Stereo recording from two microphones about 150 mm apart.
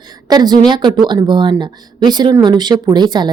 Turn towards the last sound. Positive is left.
turn(degrees=-30)  # may be behind; listen again after turning